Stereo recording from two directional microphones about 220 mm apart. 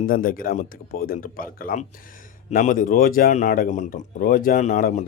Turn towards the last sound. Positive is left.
turn(degrees=35)  # may be behind; listen again after turning